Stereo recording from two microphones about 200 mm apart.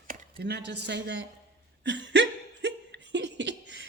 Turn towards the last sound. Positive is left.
turn(degrees=-60)  # may be behind; listen again after turning